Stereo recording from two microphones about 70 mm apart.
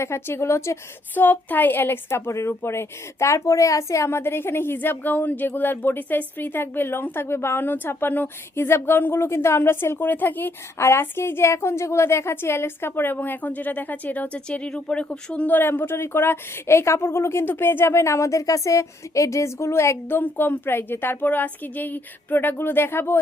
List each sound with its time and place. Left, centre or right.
0.0 s a woman's voice: left
1.1 s a woman's voice: left
10.8 s a woman's voice: left; by 15.4 s centre
15.4 s a woman's voice: left